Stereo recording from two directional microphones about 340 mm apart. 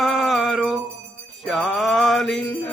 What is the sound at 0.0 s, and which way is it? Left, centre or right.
Music, centre.